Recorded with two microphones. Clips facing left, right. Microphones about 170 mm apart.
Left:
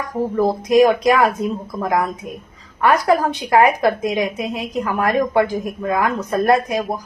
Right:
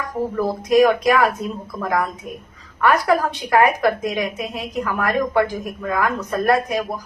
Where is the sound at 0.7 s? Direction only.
20° left (ahead or behind).